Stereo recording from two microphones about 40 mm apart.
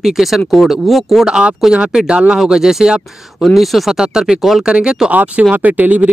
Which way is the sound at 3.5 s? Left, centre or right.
Centre.